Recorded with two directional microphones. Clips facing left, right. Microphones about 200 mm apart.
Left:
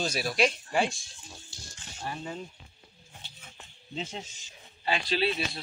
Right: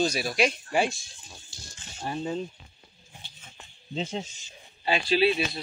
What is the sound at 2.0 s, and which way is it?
Speech, 25° right (ahead or behind).